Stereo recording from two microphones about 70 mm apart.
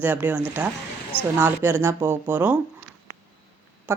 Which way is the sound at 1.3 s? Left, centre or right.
Right.